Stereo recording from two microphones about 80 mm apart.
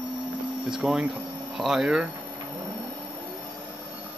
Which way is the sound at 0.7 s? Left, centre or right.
Centre.